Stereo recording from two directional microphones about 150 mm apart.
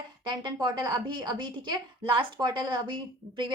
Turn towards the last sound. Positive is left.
turn(degrees=-30)  # may be behind; listen again after turning